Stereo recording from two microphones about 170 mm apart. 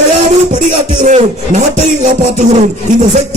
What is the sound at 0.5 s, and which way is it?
A man's voice, 45° right (ahead or behind).